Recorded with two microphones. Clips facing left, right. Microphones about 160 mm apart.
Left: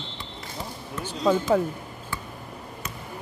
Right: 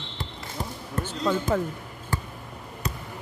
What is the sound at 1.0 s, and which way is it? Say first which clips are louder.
Speech: left 4 dB; 10° left (ahead or behind).